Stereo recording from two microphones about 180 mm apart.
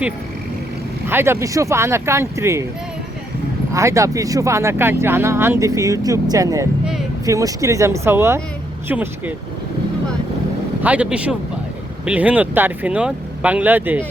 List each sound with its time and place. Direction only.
1.0 s speech: 15° right (ahead or behind)
3.7 s speech: 15° right (ahead or behind)
10.8 s speech: 5° right (ahead or behind)